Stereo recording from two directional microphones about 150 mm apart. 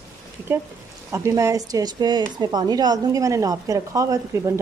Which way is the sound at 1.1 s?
20° right (ahead or behind).